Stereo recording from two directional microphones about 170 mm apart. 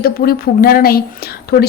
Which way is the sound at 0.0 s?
60° left (ahead or behind).